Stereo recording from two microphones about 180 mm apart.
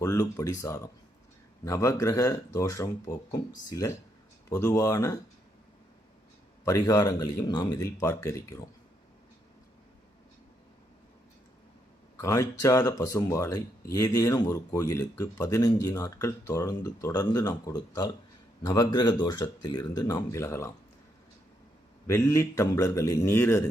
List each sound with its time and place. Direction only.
0.0 s speech: 15° left (ahead or behind)
6.7 s speech: 20° left (ahead or behind)
12.2 s speech: 15° left (ahead or behind)
22.0 s speech: 15° left (ahead or behind)